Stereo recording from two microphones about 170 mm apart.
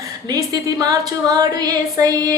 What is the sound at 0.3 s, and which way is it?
A woman's voice, 20° right (ahead or behind).